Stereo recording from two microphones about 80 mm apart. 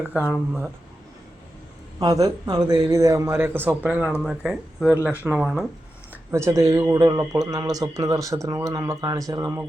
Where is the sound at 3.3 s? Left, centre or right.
Right.